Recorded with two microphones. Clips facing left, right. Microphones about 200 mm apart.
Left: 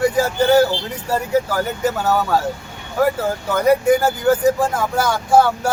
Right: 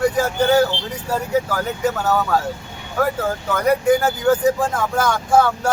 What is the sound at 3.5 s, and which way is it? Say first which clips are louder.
Speech: left 2 dB; 10° left (ahead or behind).